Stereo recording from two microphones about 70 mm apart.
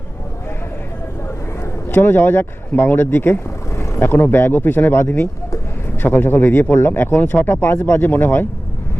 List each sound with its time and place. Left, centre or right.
1.9 s speech: left